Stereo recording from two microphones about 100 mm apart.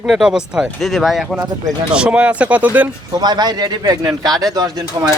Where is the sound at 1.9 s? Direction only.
10° right (ahead or behind).